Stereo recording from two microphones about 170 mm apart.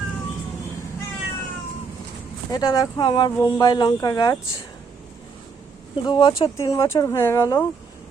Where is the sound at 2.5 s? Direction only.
20° left (ahead or behind).